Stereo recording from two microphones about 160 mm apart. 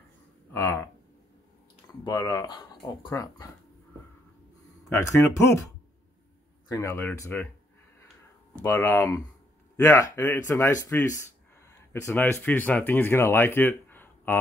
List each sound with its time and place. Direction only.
0.5 s speech: 15° left (ahead or behind)
1.9 s speech: 20° left (ahead or behind)
4.8 s speech: 15° left (ahead or behind)
6.7 s speech: 20° left (ahead or behind)
8.6 s speech: 15° left (ahead or behind)